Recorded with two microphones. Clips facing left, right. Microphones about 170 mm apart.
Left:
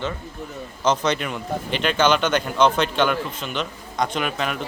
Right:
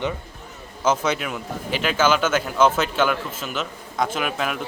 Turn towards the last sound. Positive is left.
turn(degrees=-5)  # may be behind; listen again after turning